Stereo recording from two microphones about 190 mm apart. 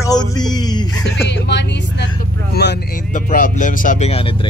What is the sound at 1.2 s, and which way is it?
Music, 65° left (ahead or behind).